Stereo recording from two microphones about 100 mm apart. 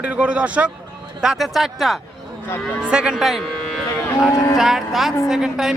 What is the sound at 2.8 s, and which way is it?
Cattle, 10° right (ahead or behind).